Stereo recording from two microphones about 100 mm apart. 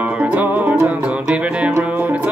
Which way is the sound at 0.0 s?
15° right (ahead or behind).